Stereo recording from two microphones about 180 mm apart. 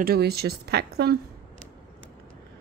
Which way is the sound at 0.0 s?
60° right (ahead or behind).